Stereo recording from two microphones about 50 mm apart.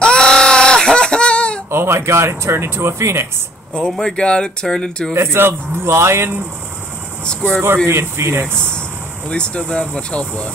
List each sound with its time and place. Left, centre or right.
0.0 s a sound: centre
1.7 s speech: right
4.0 s speech: centre
5.1 s speech: right
7.2 s speech: centre
7.8 s speech: right
9.3 s speech: left